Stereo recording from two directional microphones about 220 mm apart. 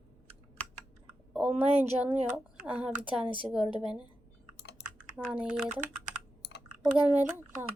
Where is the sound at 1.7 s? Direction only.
30° right (ahead or behind).